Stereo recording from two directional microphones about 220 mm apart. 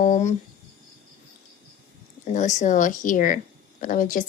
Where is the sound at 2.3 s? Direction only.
35° left (ahead or behind).